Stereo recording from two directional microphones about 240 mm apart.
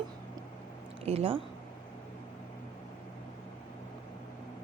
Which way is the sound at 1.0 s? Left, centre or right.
Right.